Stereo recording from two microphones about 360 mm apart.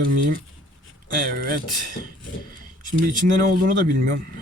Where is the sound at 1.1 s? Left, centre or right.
Right.